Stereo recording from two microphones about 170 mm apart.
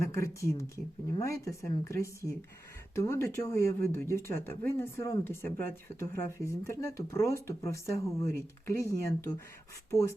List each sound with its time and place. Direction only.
0.0 s speech: 15° left (ahead or behind)